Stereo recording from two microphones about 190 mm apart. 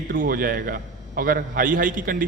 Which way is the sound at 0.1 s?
50° right (ahead or behind).